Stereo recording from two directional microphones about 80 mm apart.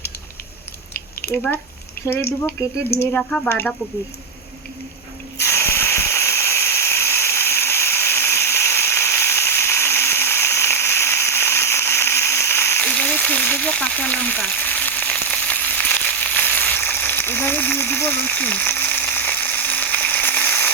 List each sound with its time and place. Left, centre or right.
1.3 s speech: left
3.2 s speech: centre
5.4 s a sound: left
12.8 s frying: centre